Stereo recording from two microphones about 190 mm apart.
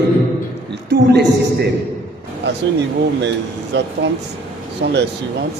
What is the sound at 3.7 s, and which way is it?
A man's voice, 65° right (ahead or behind).